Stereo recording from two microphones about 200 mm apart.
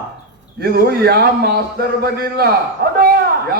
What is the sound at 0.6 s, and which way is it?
Speech, 50° right (ahead or behind).